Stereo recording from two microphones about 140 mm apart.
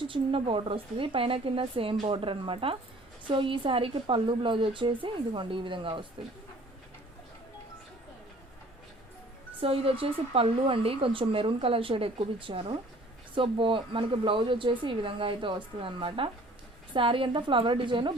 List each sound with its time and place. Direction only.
0.0 s speech: 40° right (ahead or behind)
9.6 s speech: 40° right (ahead or behind)